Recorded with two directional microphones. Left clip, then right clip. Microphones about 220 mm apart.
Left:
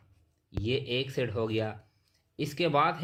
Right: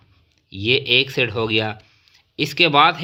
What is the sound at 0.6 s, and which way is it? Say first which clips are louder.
Speech: right 15 dB; 25° right (ahead or behind).